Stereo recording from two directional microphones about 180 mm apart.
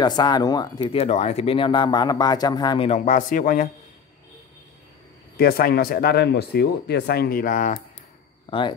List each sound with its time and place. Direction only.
0.0 s speech: 25° left (ahead or behind)
0.9 s speech: 35° left (ahead or behind)
2.9 s a man's voice: 45° left (ahead or behind)
5.4 s speech: 55° left (ahead or behind)
8.5 s speech: 30° left (ahead or behind)